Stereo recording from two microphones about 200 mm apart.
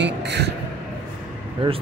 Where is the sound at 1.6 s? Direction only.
25° right (ahead or behind).